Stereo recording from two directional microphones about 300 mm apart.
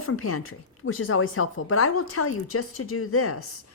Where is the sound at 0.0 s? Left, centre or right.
Left.